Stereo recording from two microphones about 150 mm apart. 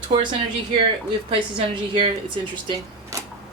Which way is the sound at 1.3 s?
35° right (ahead or behind).